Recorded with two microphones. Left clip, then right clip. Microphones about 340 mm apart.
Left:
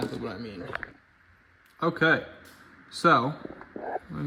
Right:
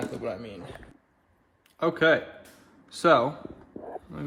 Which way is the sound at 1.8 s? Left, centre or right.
Centre.